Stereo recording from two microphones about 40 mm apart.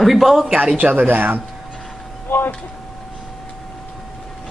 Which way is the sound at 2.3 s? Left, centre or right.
Left.